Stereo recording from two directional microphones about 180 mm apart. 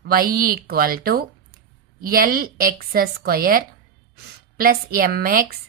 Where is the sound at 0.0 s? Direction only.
55° right (ahead or behind).